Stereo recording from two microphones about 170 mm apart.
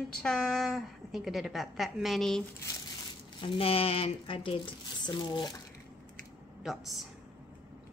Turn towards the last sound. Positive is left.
turn(degrees=0)  # may be behind; listen again after turning